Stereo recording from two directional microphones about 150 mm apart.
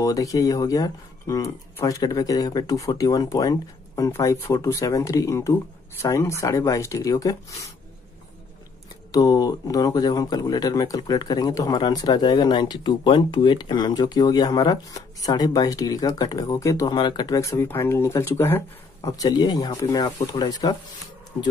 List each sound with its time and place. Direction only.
0.0 s speech: 20° left (ahead or behind)
9.1 s speech: 25° left (ahead or behind)